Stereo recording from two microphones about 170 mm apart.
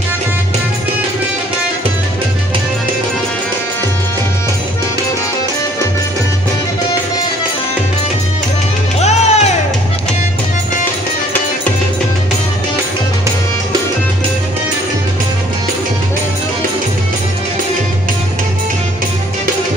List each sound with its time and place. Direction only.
9.0 s music: 40° left (ahead or behind)